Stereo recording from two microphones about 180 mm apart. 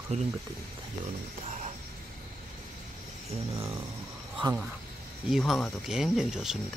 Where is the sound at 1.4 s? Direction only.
40° right (ahead or behind).